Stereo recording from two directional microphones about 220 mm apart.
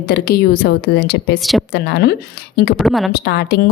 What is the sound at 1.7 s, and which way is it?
A woman's voice, 50° left (ahead or behind).